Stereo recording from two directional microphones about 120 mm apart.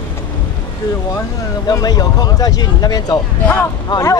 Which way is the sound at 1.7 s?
35° left (ahead or behind).